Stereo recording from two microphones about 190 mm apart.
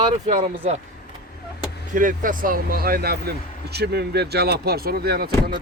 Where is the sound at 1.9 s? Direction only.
45° right (ahead or behind).